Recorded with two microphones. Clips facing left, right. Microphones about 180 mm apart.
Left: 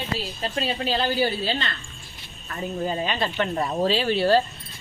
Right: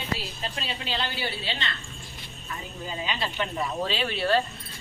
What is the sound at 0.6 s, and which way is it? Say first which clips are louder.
Speech: left 8 dB; 40° left (ahead or behind).